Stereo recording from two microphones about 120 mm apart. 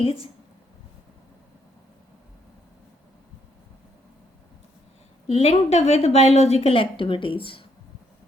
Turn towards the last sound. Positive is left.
turn(degrees=45)  # may be behind; listen again after turning